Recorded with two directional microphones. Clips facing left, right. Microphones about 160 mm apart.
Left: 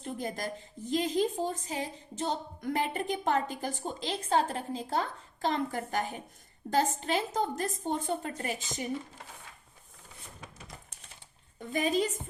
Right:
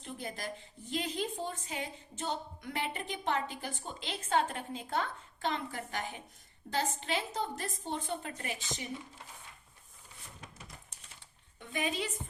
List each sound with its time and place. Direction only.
0.0 s a woman's voice: 40° left (ahead or behind)
11.6 s a woman's voice: 40° left (ahead or behind)